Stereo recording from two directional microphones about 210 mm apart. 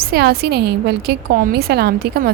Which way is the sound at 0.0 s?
50° right (ahead or behind).